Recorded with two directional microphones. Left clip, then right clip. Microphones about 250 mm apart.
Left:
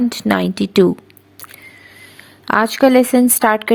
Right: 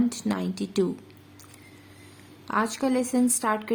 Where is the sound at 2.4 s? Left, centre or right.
Left.